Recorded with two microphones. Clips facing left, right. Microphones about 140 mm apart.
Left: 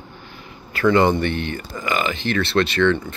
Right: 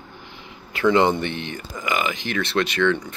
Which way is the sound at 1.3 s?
55° left (ahead or behind).